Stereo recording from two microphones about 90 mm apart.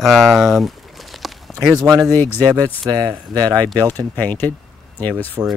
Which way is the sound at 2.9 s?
45° right (ahead or behind).